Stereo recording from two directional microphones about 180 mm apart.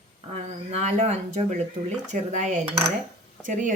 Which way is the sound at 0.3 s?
40° right (ahead or behind).